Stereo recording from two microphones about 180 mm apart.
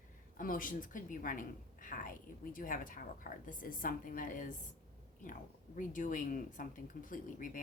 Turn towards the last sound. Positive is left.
turn(degrees=50)  # may be behind; listen again after turning